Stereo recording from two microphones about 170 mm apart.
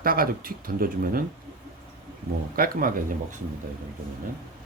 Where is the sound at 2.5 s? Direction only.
60° right (ahead or behind).